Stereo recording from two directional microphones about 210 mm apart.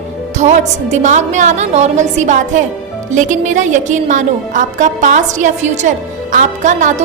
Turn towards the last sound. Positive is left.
turn(degrees=-35)  # may be behind; listen again after turning